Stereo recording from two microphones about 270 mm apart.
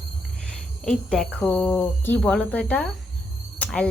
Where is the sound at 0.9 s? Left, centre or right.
Centre.